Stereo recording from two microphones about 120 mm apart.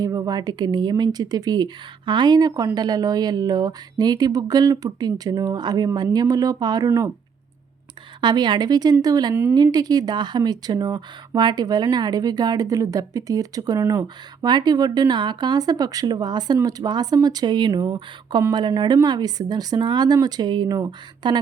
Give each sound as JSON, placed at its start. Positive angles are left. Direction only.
{"t": 0.0, "sound": "speech", "side_deg": -30}
{"t": 8.2, "sound": "speech", "side_deg": -40}
{"t": 9.3, "sound": "a woman's voice", "side_deg": -20}
{"t": 9.7, "sound": "speech", "side_deg": -35}